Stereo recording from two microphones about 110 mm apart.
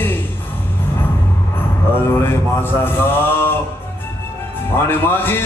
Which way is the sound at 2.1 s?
20° left (ahead or behind).